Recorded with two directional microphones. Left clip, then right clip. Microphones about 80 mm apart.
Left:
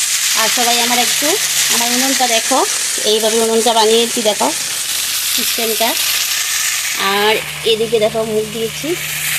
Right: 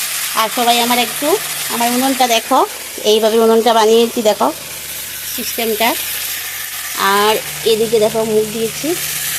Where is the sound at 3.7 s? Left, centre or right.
Centre.